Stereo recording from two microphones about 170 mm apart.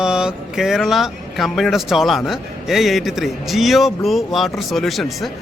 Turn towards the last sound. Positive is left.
turn(degrees=0)  # may be behind; listen again after turning